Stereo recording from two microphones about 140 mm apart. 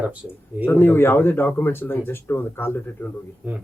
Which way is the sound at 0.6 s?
15° left (ahead or behind).